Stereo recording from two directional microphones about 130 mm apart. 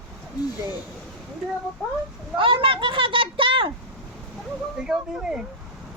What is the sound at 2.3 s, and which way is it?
Speech, 40° right (ahead or behind).